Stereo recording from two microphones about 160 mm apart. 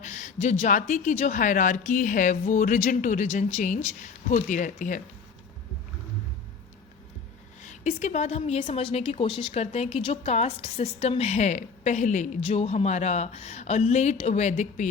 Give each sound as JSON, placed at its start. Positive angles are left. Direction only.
{"t": 0.0, "sound": "a woman's voice", "side_deg": 50}
{"t": 7.6, "sound": "a woman's voice", "side_deg": 50}